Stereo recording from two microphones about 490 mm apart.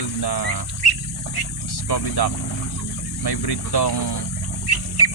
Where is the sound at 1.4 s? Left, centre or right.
Left.